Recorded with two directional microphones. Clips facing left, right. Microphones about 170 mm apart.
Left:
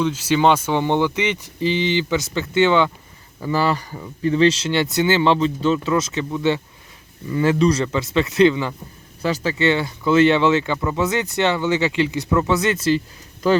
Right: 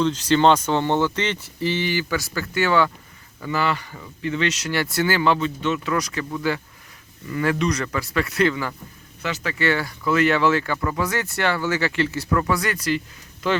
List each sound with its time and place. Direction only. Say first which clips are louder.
0.0 s speech: even; 10° left (ahead or behind)
3.4 s speech: left 4 dB; 35° left (ahead or behind)
9.2 s speech: left 5 dB; 35° left (ahead or behind)